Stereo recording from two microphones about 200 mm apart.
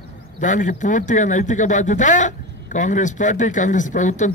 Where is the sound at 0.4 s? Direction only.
40° left (ahead or behind).